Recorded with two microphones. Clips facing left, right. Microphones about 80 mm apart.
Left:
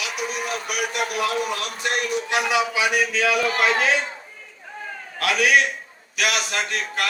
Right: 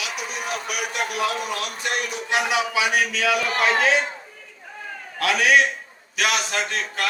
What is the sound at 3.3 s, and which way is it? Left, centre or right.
Speech, right.